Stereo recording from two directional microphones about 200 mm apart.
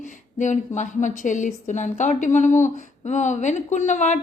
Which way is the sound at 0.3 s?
35° left (ahead or behind).